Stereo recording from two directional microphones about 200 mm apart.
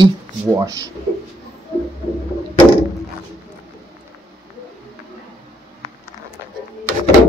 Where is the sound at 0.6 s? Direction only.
15° right (ahead or behind).